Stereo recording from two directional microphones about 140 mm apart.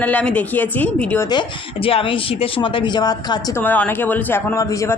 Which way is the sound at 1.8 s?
40° left (ahead or behind).